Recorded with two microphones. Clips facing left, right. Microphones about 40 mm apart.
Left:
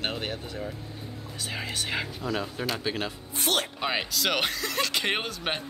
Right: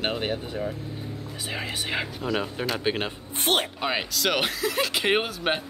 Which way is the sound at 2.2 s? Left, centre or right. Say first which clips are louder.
Right 3 dB; right.